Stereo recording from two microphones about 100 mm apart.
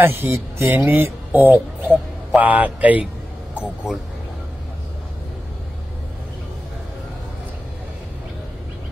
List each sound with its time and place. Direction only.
0.0 s speech: 25° right (ahead or behind)